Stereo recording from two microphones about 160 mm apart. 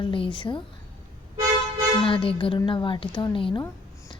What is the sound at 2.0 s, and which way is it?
A woman's voice, 35° left (ahead or behind).